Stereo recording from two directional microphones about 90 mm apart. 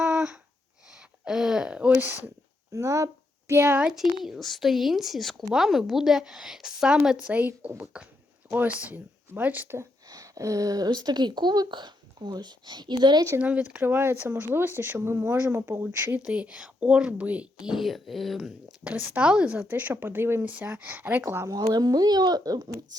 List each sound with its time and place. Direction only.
0.0 s a sound: 5° right (ahead or behind)
2.7 s speech: 35° right (ahead or behind)
3.9 s speech: centre (ahead or behind); by 9.8 s 20° right (ahead or behind)
10.1 s speech: 40° right (ahead or behind)
13.4 s speech: 15° right (ahead or behind)
16.2 s speech: 15° right (ahead or behind)
18.9 s speech: 20° right (ahead or behind)
21.4 s speech: 45° right (ahead or behind)